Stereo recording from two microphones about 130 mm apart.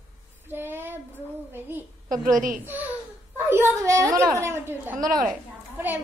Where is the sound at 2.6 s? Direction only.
15° right (ahead or behind).